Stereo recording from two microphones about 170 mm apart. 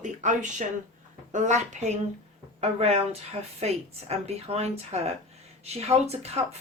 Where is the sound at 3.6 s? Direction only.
40° right (ahead or behind).